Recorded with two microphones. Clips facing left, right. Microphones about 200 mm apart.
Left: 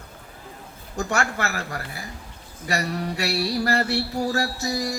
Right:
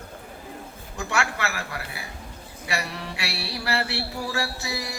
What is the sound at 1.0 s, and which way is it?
Mantra, 40° left (ahead or behind).